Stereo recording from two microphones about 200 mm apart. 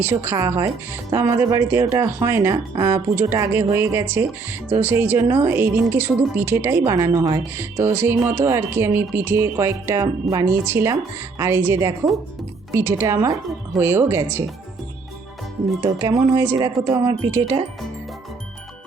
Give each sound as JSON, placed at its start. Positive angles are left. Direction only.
{"t": 0.0, "sound": "speech", "side_deg": -10}
{"t": 15.8, "sound": "speech", "side_deg": -20}